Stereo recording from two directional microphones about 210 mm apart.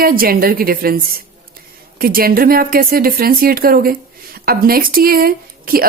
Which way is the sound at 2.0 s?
45° right (ahead or behind).